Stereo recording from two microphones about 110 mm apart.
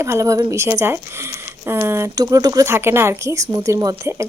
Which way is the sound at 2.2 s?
35° right (ahead or behind).